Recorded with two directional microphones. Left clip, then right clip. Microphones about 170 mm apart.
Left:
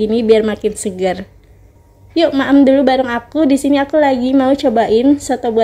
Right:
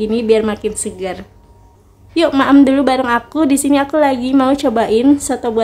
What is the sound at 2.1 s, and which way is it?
A woman's voice, 5° left (ahead or behind).